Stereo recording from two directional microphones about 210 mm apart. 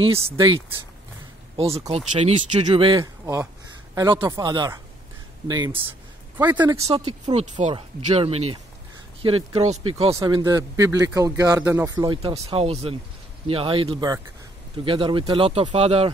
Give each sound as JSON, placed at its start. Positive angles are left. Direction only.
{"t": 0.1, "sound": "speech", "side_deg": -25}
{"t": 1.8, "sound": "speech", "side_deg": -30}
{"t": 6.9, "sound": "speech", "side_deg": -25}